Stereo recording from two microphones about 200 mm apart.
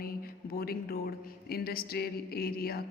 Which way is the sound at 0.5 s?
50° left (ahead or behind).